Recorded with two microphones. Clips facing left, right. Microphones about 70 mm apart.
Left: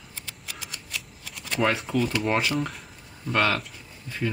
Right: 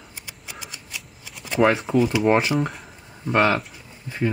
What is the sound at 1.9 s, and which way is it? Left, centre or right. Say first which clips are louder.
Speech: right 6 dB; centre.